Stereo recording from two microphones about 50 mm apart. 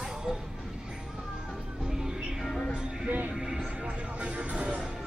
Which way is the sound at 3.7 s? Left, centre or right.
Right.